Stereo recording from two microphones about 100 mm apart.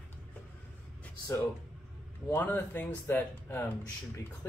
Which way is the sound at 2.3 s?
20° left (ahead or behind).